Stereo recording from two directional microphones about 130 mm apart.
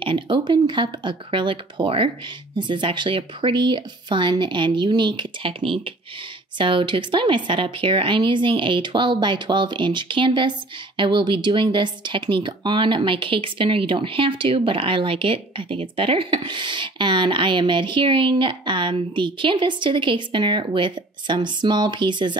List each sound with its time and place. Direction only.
0.0 s speech: 35° right (ahead or behind)